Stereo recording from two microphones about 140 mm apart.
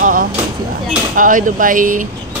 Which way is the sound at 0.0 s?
80° right.